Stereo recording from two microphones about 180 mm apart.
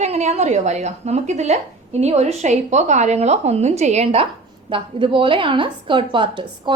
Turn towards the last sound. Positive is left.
turn(degrees=-25)  # may be behind; listen again after turning